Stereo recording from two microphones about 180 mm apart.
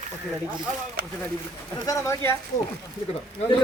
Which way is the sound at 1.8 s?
15° left (ahead or behind).